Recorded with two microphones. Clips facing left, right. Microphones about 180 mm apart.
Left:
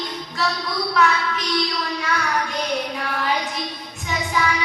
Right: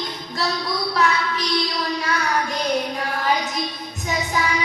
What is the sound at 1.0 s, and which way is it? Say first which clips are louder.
Child singing: left 2 dB; 35° right (ahead or behind).